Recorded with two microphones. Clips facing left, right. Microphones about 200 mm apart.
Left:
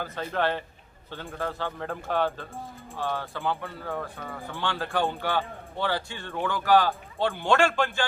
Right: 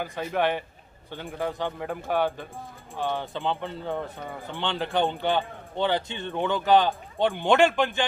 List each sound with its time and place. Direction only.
0.0 s a man's voice: 15° right (ahead or behind)